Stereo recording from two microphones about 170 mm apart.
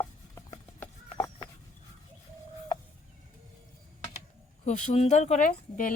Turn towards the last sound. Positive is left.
turn(degrees=50)  # may be behind; listen again after turning